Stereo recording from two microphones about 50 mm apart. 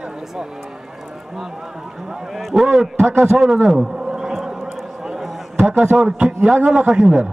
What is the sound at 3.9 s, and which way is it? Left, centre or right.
Bee, centre.